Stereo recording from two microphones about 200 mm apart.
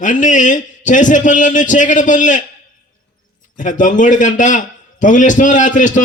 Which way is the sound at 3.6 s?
40° left (ahead or behind).